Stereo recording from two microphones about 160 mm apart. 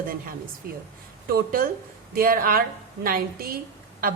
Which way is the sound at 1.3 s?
65° right (ahead or behind).